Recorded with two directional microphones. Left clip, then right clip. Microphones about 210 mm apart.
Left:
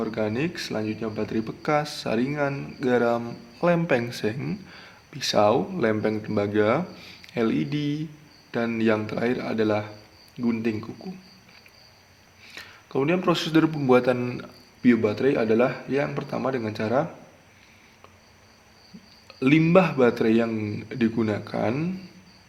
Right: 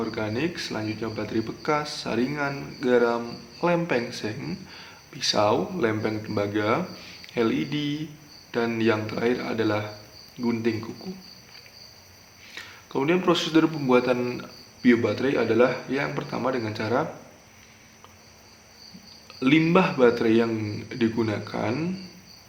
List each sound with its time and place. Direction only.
0.0 s a man's voice: 40° left (ahead or behind)
12.5 s a man's voice: 35° left (ahead or behind)
19.4 s a man's voice: 35° left (ahead or behind)